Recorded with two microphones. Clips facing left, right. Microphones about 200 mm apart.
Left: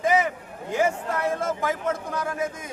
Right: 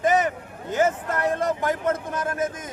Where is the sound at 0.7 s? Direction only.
Centre (ahead or behind).